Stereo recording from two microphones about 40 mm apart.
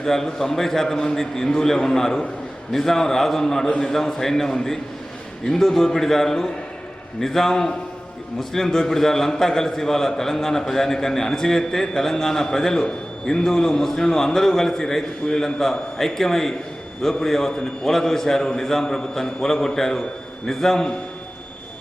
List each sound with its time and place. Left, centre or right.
0.0 s a man's voice: centre